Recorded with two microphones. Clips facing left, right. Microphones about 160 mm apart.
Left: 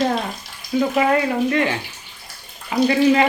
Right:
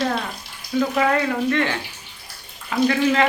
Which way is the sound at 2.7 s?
15° left (ahead or behind).